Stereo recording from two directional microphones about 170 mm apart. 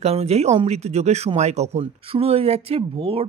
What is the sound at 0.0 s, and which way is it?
Speech, 40° right (ahead or behind).